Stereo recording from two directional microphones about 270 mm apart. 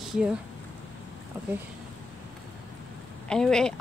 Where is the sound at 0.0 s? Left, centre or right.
Centre.